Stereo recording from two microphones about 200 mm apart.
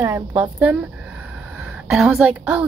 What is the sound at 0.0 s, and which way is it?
Speech, 10° right (ahead or behind).